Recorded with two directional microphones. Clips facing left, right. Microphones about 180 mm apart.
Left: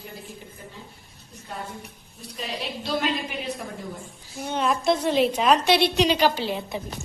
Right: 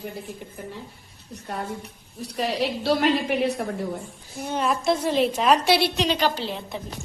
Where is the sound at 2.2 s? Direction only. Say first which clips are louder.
Right 8 dB; 70° right (ahead or behind).